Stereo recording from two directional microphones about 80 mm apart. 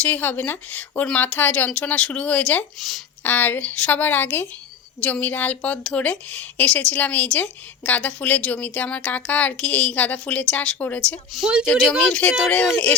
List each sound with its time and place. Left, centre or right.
0.0 s a woman's voice: left
2.7 s speech: centre
3.2 s a woman's voice: left
11.3 s speech: centre
11.9 s a woman's voice: centre